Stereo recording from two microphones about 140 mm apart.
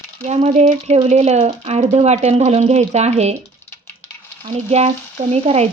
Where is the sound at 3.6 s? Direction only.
15° left (ahead or behind).